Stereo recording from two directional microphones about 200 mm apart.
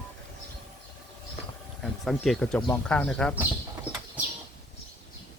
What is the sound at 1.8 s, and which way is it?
Speech, centre (ahead or behind).